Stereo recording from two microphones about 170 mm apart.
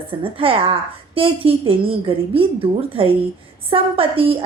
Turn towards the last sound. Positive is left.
turn(degrees=-35)  # may be behind; listen again after turning